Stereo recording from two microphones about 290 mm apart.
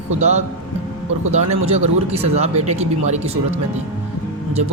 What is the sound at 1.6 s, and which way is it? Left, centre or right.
A man's voice, right.